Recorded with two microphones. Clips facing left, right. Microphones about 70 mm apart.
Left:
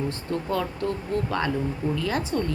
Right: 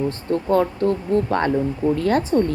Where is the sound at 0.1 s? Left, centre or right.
Right.